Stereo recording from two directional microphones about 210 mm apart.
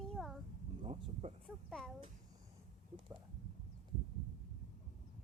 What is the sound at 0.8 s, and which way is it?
Speech, 30° right (ahead or behind).